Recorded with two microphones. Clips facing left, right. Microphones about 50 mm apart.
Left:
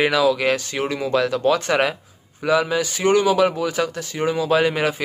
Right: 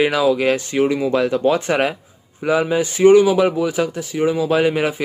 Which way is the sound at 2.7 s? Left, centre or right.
Right.